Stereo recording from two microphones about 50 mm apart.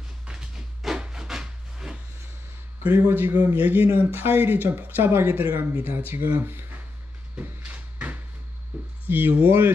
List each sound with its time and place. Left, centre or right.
0.3 s rub: centre
2.8 s a man's voice: right
3.1 s speech: right
7.3 s a sound: right
9.0 s speech: right